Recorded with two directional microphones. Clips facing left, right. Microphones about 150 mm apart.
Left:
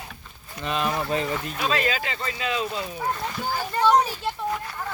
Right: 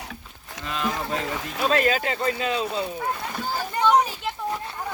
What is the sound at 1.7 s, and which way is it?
Speech, 50° right (ahead or behind).